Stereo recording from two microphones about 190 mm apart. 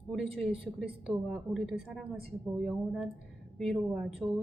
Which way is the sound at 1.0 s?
Centre (ahead or behind).